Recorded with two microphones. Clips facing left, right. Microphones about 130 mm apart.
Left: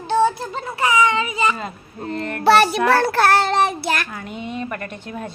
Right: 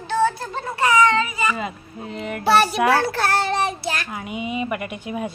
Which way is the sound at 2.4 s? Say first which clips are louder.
Left 3 dB; 75° left (ahead or behind).